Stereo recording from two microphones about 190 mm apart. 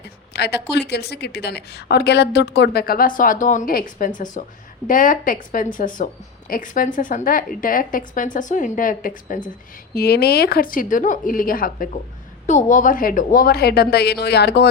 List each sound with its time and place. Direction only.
0.3 s a woman's voice: 60° left (ahead or behind); by 9.4 s 45° left (ahead or behind)
9.9 s a woman's voice: 55° left (ahead or behind)